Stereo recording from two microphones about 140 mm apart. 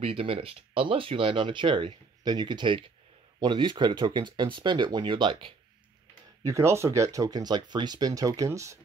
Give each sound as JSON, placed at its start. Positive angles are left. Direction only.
{"t": 0.0, "sound": "speech", "side_deg": -40}
{"t": 6.4, "sound": "speech", "side_deg": -20}